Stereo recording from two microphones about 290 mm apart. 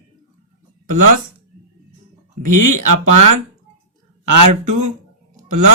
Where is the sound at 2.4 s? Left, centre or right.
Right.